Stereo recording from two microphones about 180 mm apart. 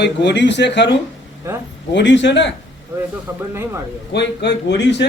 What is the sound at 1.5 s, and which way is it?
Speech, 15° right (ahead or behind).